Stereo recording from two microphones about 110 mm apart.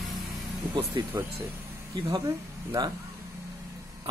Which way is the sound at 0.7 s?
55° right (ahead or behind).